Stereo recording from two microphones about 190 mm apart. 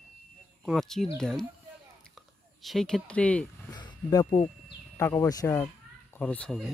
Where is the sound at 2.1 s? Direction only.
Centre (ahead or behind).